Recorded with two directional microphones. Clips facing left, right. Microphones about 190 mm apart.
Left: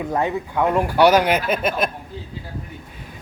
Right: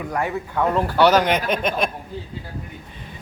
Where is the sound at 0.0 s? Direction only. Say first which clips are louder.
Left 3 dB; 20° left (ahead or behind); by 1.9 s 5° left (ahead or behind).